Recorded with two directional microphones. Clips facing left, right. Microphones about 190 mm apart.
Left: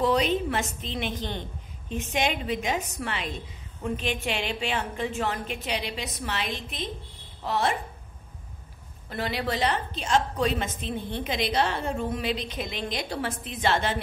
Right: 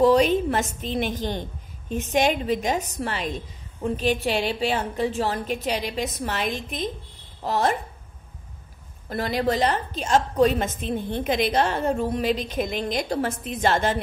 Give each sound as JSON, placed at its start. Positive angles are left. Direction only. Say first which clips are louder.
{"t": 0.0, "sound": "a woman's voice", "louder": "right 6 dB", "side_deg": -45}
{"t": 9.1, "sound": "a woman's voice", "louder": "right 6 dB", "side_deg": -40}